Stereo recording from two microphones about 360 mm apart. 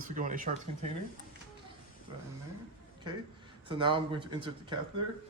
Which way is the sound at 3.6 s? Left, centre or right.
Centre.